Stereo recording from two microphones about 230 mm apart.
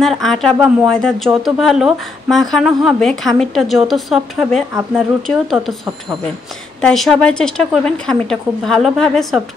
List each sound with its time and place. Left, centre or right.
0.0 s speech: centre